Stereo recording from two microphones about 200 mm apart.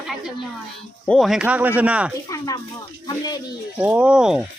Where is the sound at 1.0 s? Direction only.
Centre (ahead or behind).